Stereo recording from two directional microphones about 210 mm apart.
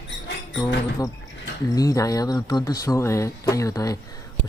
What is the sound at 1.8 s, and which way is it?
Speech, 15° left (ahead or behind).